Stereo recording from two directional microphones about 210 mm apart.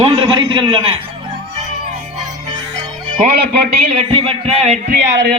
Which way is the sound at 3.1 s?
45° right (ahead or behind).